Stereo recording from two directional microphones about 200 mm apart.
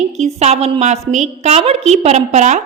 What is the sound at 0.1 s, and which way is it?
A woman's voice, 35° right (ahead or behind).